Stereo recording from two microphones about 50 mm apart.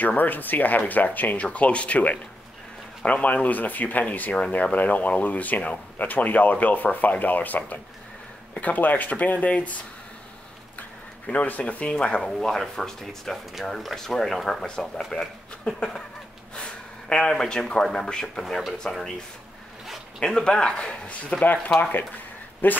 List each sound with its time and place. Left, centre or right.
0.0 s speech: left
11.3 s speech: left
12.2 s speech: centre
17.1 s speech: centre
20.2 s speech: centre
22.6 s speech: left